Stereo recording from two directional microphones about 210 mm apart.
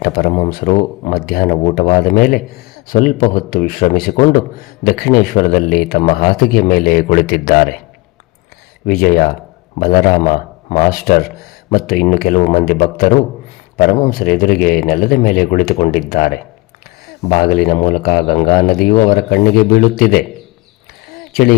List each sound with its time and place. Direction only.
0.0 s speech: 40° left (ahead or behind)
8.9 s a man's voice: 45° left (ahead or behind)
21.1 s a sound: 45° left (ahead or behind)